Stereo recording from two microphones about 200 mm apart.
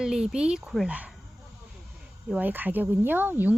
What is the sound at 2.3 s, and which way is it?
Speech, 10° right (ahead or behind).